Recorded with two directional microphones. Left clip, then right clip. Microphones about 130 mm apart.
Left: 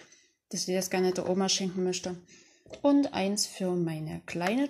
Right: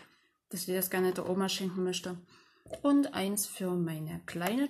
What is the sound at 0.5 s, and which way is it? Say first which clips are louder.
Speech: left 4 dB; 40° left (ahead or behind).